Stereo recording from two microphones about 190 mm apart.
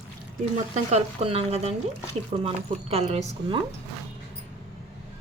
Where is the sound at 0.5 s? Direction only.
35° right (ahead or behind).